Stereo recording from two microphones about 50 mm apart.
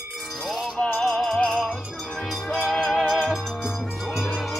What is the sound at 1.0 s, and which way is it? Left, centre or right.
Music, centre.